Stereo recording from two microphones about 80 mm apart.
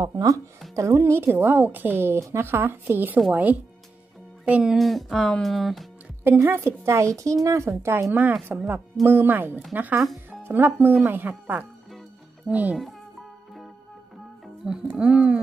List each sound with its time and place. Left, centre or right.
0.0 s a woman's voice: right
4.5 s speech: centre
4.7 s speech: centre
6.4 s a woman's voice: right
14.4 s speech: centre